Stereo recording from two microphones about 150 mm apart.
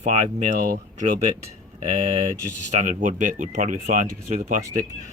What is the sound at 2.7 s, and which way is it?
Speech, 55° right (ahead or behind).